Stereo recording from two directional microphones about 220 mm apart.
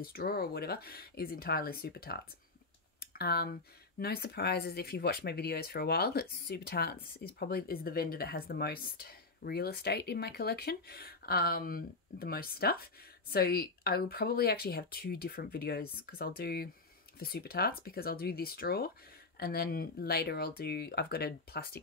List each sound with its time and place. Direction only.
0.0 s speech: 45° left (ahead or behind)
3.0 s computer keyboard: 45° left (ahead or behind)
4.0 s speech: 45° left (ahead or behind)